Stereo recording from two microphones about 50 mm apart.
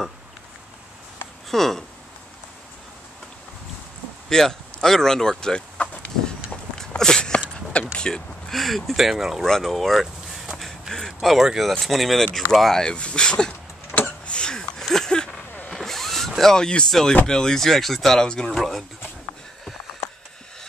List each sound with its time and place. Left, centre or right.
1.5 s speech: centre
4.3 s speech: centre
5.4 s a sound: centre
7.9 s speech: centre
9.4 s speech: centre
10.9 s speech: centre
11.1 s speech: centre
12.8 s speech: centre
13.5 s a sound: left
14.3 s a sound: centre
15.7 s vehicle: centre
17.3 s speech: centre
18.6 s speech: centre